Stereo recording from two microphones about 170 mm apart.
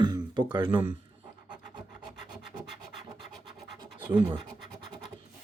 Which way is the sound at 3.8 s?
25° right (ahead or behind).